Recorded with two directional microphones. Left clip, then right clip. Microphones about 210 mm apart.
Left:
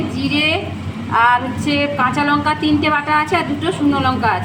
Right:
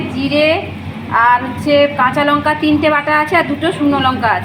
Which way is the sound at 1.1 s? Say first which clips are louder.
Right 2 dB; 20° left (ahead or behind).